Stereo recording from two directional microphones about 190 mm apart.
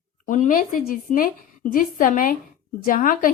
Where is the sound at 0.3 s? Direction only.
45° left (ahead or behind).